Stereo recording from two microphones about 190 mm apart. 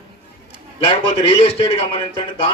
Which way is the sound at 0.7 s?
30° left (ahead or behind).